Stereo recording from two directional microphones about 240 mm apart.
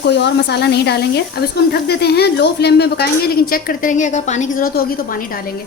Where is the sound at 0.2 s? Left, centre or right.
Left.